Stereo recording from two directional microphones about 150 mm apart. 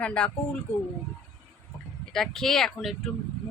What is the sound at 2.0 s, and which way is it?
Speech, 5° left (ahead or behind).